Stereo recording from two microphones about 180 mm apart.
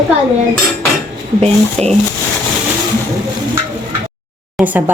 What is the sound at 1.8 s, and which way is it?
Speech, 5° left (ahead or behind).